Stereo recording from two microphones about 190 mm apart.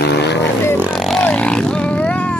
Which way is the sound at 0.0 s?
60° left (ahead or behind).